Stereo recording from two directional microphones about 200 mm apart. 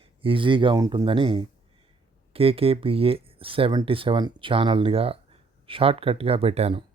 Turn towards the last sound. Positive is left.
turn(degrees=-30)  # may be behind; listen again after turning